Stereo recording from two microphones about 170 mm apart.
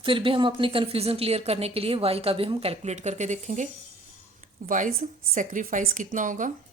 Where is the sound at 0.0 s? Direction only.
30° right (ahead or behind); by 6.5 s 50° right (ahead or behind).